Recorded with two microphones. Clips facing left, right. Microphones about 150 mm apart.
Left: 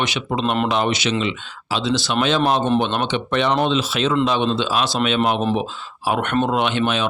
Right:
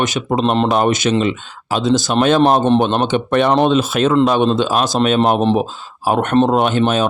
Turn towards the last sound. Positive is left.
turn(degrees=-40)  # may be behind; listen again after turning